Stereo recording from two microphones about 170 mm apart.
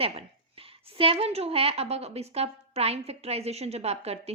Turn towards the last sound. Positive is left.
turn(degrees=-40)  # may be behind; listen again after turning